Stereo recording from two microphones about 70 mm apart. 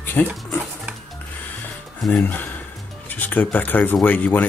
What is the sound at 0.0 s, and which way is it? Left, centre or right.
Dog, left.